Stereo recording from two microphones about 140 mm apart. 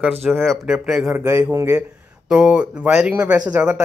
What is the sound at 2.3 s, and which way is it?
Speech, 5° right (ahead or behind).